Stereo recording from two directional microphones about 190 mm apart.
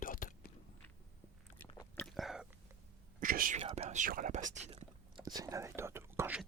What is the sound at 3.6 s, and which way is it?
Speech, 35° right (ahead or behind).